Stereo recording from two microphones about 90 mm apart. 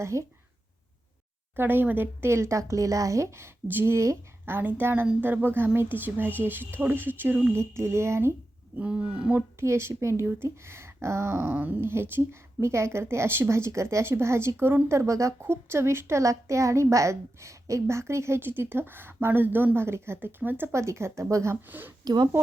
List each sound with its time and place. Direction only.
0.0 s speech: 35° right (ahead or behind)
1.5 s speech: 25° right (ahead or behind)
7.5 s speech: 30° right (ahead or behind)
8.8 s roaring cats: 10° right (ahead or behind)
9.6 s speech: 30° right (ahead or behind)
22.0 s speech: 50° right (ahead or behind)